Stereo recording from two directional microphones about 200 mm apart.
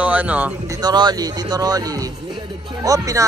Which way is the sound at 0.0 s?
5° right (ahead or behind).